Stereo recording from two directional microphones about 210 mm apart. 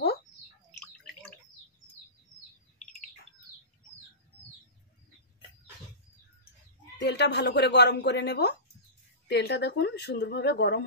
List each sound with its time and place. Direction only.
7.0 s speech: 55° left (ahead or behind)